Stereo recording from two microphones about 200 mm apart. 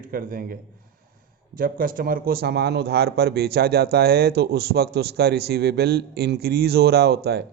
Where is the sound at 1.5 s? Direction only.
45° right (ahead or behind).